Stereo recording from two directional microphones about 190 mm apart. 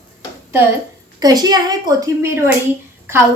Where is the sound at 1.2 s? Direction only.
20° right (ahead or behind).